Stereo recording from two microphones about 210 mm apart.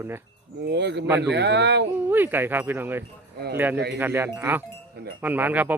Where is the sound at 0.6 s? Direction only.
55° right (ahead or behind).